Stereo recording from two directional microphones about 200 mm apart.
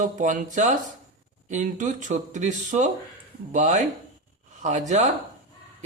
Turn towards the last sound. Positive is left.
turn(degrees=-35)  # may be behind; listen again after turning